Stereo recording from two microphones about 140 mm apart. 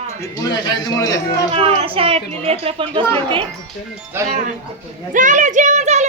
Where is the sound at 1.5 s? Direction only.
45° right (ahead or behind).